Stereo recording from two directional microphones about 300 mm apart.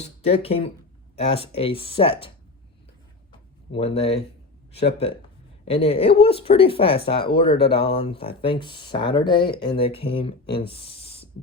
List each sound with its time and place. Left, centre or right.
0.0 s speech: left
3.7 s speech: centre
5.6 s speech: centre